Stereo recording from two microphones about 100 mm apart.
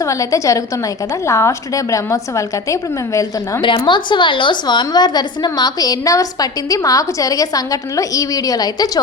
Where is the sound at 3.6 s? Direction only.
55° left (ahead or behind).